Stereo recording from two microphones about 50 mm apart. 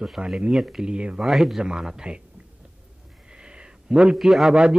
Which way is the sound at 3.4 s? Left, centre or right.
Centre.